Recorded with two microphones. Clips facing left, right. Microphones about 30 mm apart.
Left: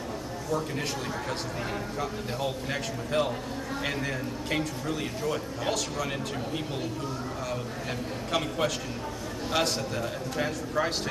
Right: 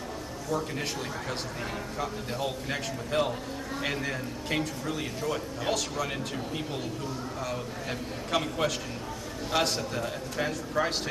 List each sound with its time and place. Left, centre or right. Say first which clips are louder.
0.5 s a man's voice: left 1 dB; centre
2.0 s a man's voice: right 2 dB; centre
8.3 s a man's voice: even; centre